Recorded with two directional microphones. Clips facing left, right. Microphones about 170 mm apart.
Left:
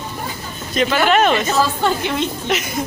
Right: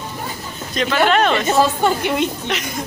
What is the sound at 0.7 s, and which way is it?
Speech, 5° left (ahead or behind).